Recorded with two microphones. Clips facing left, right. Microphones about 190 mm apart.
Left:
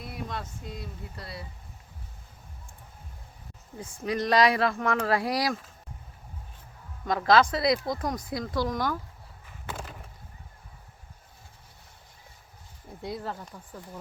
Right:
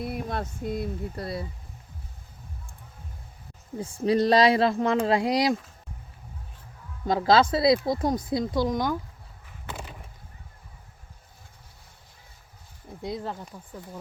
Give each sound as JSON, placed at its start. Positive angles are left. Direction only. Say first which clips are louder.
{"t": 0.0, "sound": "speech", "louder": "right 6 dB", "side_deg": -55}
{"t": 4.0, "sound": "speech", "louder": "right 4 dB", "side_deg": -30}
{"t": 7.0, "sound": "speech", "louder": "right 2 dB", "side_deg": -25}
{"t": 13.1, "sound": "speech", "louder": "right 2 dB", "side_deg": 5}
{"t": 13.4, "sound": "speech", "louder": "right 2 dB", "side_deg": -10}